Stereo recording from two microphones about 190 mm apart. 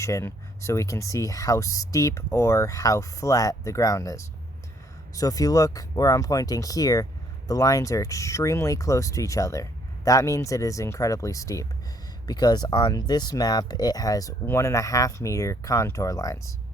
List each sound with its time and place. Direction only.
0.0 s speech: 15° left (ahead or behind)